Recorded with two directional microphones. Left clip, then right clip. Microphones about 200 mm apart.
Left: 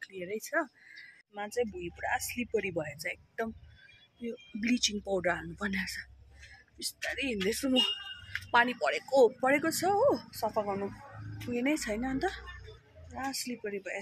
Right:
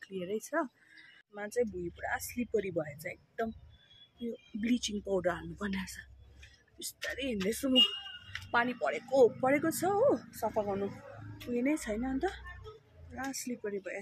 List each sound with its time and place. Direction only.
0.0 s speech: 5° right (ahead or behind)
11.5 s speech: centre (ahead or behind)
13.3 s speech: 50° left (ahead or behind)
13.6 s speech: 5° left (ahead or behind)